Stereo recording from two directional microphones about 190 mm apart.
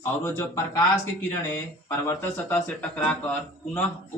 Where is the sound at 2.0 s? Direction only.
10° left (ahead or behind).